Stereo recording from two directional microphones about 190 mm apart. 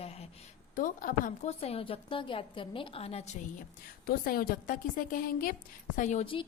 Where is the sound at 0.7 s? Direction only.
45° left (ahead or behind).